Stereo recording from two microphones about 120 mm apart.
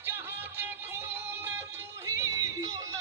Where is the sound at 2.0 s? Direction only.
30° right (ahead or behind).